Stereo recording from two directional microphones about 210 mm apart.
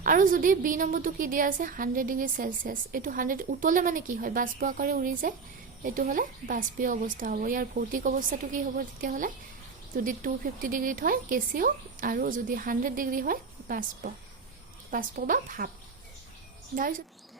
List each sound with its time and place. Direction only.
0.0 s a woman's voice: 40° right (ahead or behind)
16.7 s a woman's voice: 40° right (ahead or behind)